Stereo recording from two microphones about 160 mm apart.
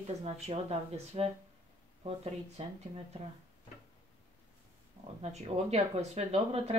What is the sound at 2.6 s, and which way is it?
Speech, 45° right (ahead or behind).